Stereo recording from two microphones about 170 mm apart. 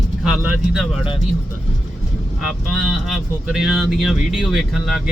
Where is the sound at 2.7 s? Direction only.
Centre (ahead or behind).